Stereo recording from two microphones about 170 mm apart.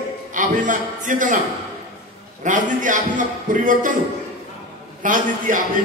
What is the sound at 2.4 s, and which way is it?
A man's voice, 50° right (ahead or behind).